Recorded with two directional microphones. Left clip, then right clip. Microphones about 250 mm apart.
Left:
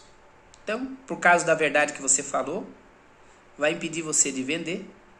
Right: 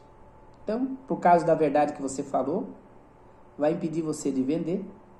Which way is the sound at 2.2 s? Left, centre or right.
Left.